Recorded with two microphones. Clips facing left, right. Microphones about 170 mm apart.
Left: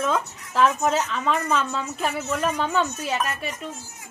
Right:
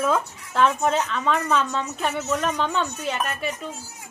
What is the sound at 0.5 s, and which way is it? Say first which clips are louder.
A woman's voice: even; 5° left (ahead or behind).